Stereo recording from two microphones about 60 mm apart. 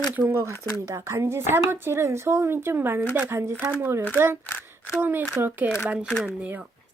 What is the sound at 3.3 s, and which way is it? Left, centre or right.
Speech, right.